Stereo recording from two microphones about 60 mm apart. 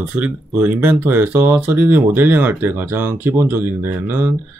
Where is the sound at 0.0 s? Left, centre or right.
Right.